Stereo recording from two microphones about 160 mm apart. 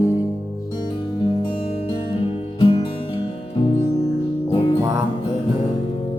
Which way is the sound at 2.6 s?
35° left (ahead or behind).